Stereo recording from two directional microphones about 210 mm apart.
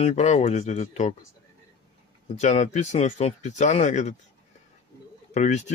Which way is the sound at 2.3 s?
35° left (ahead or behind).